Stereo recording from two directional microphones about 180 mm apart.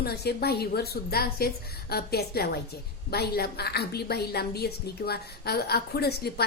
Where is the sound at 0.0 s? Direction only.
60° left (ahead or behind).